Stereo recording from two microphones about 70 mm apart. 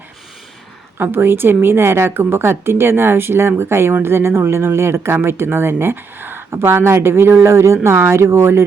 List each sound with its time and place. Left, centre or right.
0.9 s speech: right